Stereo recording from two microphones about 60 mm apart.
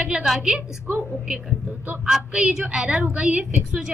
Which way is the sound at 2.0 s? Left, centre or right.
Centre.